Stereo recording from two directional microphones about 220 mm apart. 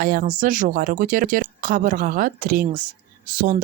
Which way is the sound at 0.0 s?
40° right (ahead or behind).